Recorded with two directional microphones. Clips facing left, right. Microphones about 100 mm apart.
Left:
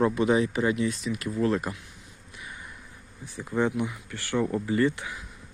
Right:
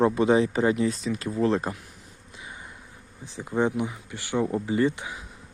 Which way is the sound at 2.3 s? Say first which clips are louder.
Even; 25° right (ahead or behind).